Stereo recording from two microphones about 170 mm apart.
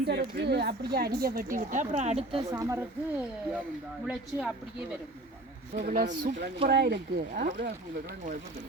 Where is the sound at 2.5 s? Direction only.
20° right (ahead or behind).